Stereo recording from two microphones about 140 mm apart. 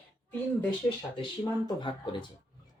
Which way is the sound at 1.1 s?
35° left (ahead or behind).